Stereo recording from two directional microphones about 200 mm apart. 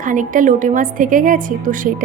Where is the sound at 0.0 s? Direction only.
40° right (ahead or behind).